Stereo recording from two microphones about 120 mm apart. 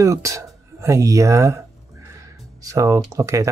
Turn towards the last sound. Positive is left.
turn(degrees=-25)  # may be behind; listen again after turning